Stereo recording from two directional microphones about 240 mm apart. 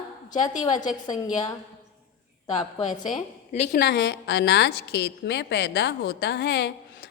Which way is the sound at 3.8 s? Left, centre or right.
Left.